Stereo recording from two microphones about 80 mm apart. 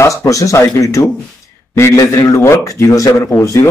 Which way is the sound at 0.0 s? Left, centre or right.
Left.